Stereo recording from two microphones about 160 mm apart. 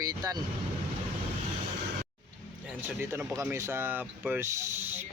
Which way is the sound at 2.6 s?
15° right (ahead or behind).